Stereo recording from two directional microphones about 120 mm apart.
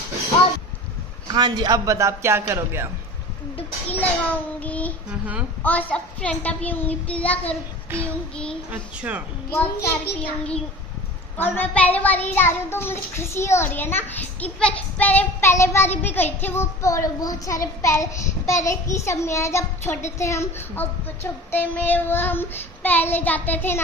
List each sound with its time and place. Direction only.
1.3 s speech: 35° right (ahead or behind)
4.6 s a child's voice: 10° left (ahead or behind)
5.2 s a woman's voice: 10° right (ahead or behind)
5.6 s a child's voice: 15° left (ahead or behind)
7.9 s a woman's voice: 20° right (ahead or behind)
9.5 s a child's voice: 15° left (ahead or behind)